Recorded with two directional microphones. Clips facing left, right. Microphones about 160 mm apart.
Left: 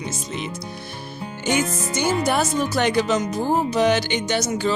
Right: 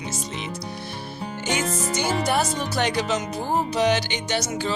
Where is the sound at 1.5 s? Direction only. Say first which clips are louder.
Left 3 dB; 50° left (ahead or behind).